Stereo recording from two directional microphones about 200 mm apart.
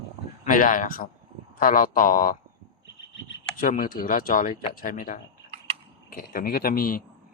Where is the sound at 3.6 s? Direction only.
45° left (ahead or behind).